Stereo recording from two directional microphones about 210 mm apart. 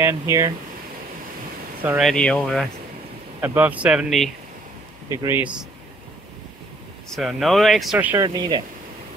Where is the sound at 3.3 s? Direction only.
10° right (ahead or behind).